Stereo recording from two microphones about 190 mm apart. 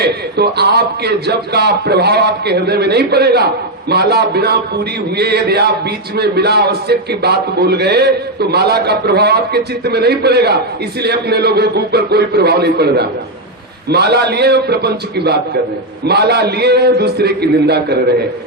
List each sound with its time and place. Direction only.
0.0 s a man's voice: 60° right (ahead or behind)